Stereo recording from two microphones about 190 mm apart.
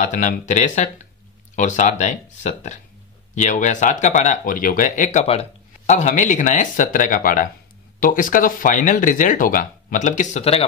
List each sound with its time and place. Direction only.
0.0 s speech: 40° left (ahead or behind)